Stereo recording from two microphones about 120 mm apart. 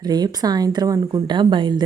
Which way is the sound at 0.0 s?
35° right (ahead or behind).